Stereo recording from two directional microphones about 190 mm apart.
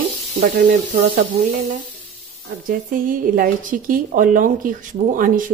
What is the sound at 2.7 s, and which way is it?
Speech, 45° right (ahead or behind).